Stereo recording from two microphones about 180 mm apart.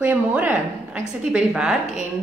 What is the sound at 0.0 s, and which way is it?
A woman's voice, 10° right (ahead or behind).